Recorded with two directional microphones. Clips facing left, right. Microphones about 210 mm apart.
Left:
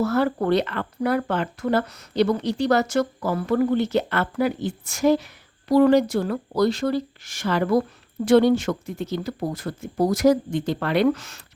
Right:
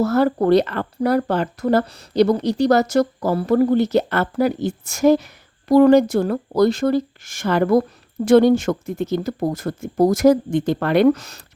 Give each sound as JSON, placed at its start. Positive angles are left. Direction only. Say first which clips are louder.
{"t": 0.0, "sound": "speech", "louder": "right 4 dB", "side_deg": -40}